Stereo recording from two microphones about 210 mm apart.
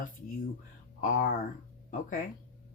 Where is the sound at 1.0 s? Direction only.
40° left (ahead or behind).